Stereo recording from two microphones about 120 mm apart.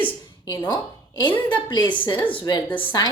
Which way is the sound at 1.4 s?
40° left (ahead or behind).